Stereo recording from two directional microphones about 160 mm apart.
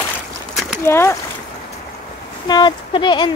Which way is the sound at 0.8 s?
15° left (ahead or behind).